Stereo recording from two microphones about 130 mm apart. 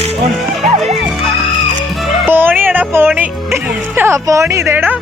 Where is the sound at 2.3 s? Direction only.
15° right (ahead or behind).